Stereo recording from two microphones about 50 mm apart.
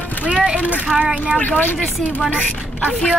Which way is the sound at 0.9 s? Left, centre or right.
Right.